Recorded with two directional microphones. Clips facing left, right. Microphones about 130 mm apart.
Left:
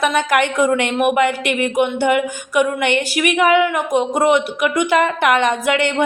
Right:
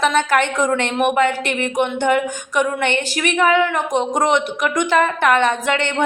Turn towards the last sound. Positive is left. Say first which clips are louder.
# left 2 dB
turn(degrees=10)  # may be behind; listen again after turning